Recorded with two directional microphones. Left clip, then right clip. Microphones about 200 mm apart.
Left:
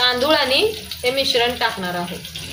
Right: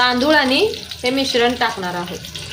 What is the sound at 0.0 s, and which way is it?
Speech, 35° right (ahead or behind).